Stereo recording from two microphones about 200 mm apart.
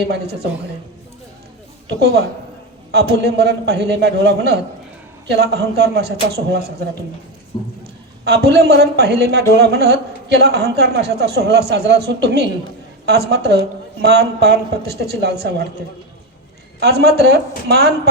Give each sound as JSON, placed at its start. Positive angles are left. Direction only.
{"t": 0.0, "sound": "a man's voice", "side_deg": -55}
{"t": 1.9, "sound": "a man's voice", "side_deg": -55}
{"t": 7.5, "sound": "speech", "side_deg": 25}
{"t": 8.2, "sound": "a man's voice", "side_deg": -55}
{"t": 16.8, "sound": "a man's voice", "side_deg": -55}